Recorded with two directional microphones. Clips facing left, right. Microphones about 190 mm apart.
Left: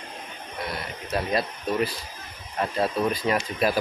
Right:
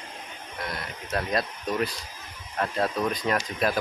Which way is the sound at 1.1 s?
5° left (ahead or behind).